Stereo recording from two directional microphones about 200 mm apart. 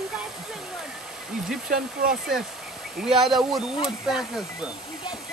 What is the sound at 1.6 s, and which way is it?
Speech, 45° right (ahead or behind).